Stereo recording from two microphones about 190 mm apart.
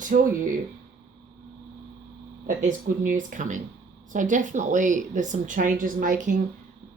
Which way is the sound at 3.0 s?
45° right (ahead or behind).